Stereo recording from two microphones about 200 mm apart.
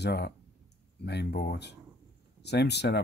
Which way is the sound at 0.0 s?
55° left (ahead or behind).